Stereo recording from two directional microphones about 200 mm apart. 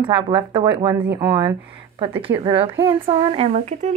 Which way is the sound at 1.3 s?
20° right (ahead or behind).